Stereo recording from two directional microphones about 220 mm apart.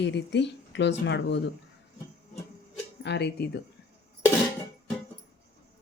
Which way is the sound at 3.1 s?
50° left (ahead or behind).